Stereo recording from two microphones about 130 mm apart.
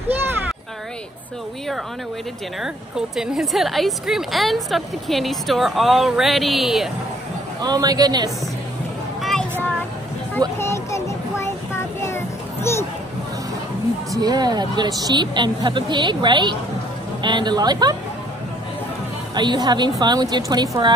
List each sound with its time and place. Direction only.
3.2 s a woman's voice: 5° right (ahead or behind)
7.6 s speech: 30° right (ahead or behind)
9.2 s a sound: 5° left (ahead or behind)
10.6 s child singing: 20° left (ahead or behind)
12.7 s a sound: 20° left (ahead or behind)
14.1 s speech: 30° right (ahead or behind)
19.3 s speech: 35° right (ahead or behind)